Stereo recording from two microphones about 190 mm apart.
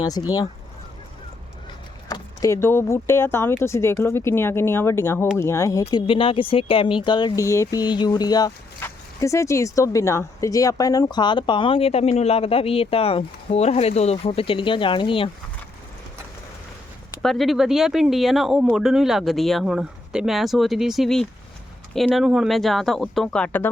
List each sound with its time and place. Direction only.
0.0 s speech: 20° left (ahead or behind)
2.0 s speech: 20° left (ahead or behind)
5.8 s speech: 25° left (ahead or behind)
17.2 s speech: centre (ahead or behind)